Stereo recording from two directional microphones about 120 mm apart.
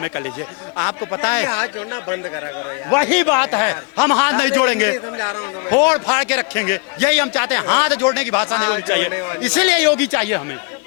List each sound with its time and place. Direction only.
0.8 s a man's voice: 20° left (ahead or behind)